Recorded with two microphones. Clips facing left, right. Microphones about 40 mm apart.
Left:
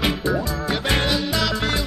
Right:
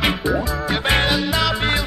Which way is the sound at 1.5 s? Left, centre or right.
Right.